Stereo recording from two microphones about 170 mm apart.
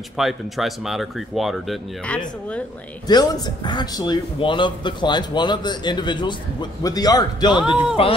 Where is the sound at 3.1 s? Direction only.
25° left (ahead or behind).